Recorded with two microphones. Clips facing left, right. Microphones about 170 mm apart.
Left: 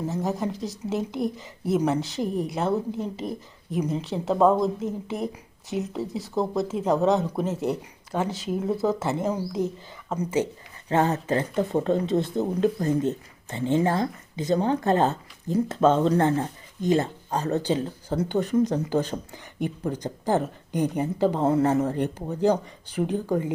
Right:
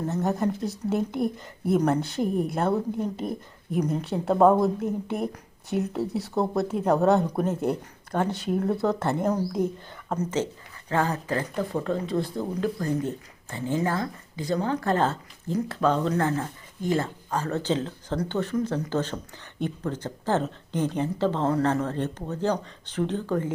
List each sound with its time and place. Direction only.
0.0 s speech: centre (ahead or behind)
1.7 s speech: 5° left (ahead or behind)
3.8 s speech: 5° left (ahead or behind)